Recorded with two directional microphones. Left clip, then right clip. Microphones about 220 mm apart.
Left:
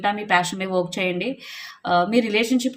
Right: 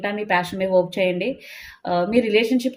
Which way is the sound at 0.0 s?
20° left (ahead or behind).